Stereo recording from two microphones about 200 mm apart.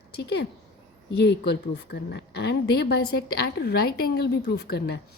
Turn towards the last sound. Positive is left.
turn(degrees=55)  # may be behind; listen again after turning